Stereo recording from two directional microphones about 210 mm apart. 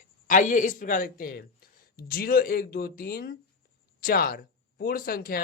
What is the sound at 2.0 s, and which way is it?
Speech, 45° left (ahead or behind).